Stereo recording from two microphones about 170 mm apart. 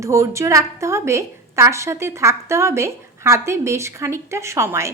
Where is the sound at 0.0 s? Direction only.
15° right (ahead or behind).